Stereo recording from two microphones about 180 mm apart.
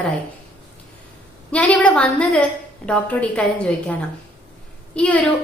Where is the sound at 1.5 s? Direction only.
5° left (ahead or behind).